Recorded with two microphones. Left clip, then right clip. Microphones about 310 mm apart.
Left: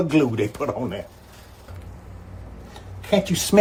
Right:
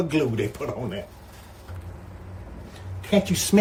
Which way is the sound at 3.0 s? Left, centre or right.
Centre.